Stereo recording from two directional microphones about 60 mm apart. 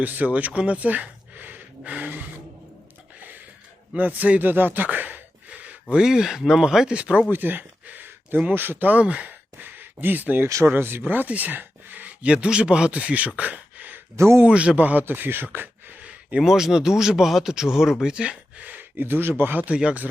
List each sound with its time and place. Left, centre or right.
0.0 s speech: right
3.2 s a sound: right
3.9 s speech: right
5.9 s speech: centre
7.3 s a sound: right
8.4 s speech: right
9.6 s speech: right
14.2 s speech: right
14.4 s speech: centre; by 15.4 s right
16.0 s a sound: right
16.4 s speech: centre
18.6 s speech: right